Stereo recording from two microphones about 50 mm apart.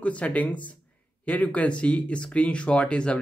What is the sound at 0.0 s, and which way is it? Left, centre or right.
Speech, left.